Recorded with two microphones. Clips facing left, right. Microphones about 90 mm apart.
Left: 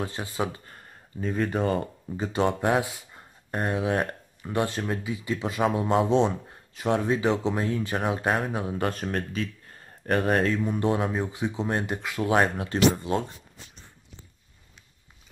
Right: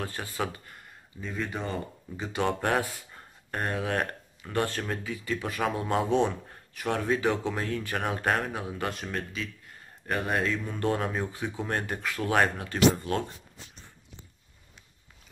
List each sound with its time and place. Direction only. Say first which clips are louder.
0.0 s speech: left 3 dB; 20° left (ahead or behind)
1.4 s speech: left 7 dB; 50° left (ahead or behind)
2.4 s speech: left 3 dB; 10° left (ahead or behind)
5.8 s speech: left 5 dB; 5° left (ahead or behind)
6.0 s speech: left 3 dB; 25° left (ahead or behind)
8.0 s speech: left 1 dB; 10° left (ahead or behind)
8.5 s speech: left 5 dB; 35° left (ahead or behind)
10.6 s speech: left 4 dB; 15° left (ahead or behind)